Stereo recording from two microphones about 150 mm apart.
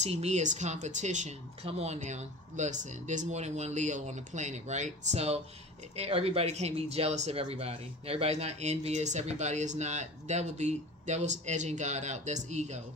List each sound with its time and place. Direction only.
0.0 s speech: 50° right (ahead or behind)